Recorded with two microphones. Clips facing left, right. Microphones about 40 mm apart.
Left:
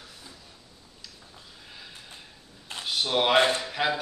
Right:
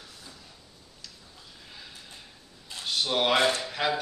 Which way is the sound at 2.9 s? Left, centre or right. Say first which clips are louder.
Left 1 dB; centre.